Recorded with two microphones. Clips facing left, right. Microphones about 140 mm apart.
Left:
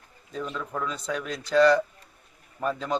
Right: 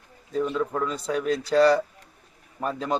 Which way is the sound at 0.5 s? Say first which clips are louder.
Right 5 dB; 30° right (ahead or behind).